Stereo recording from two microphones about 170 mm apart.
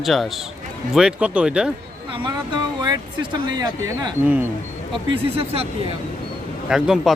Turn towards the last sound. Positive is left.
turn(degrees=-5)  # may be behind; listen again after turning